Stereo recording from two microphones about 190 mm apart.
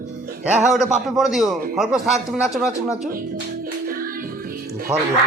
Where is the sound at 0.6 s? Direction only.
5° right (ahead or behind).